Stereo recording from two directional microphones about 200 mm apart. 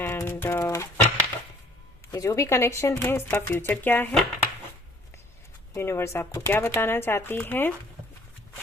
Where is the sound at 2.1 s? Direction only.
15° left (ahead or behind).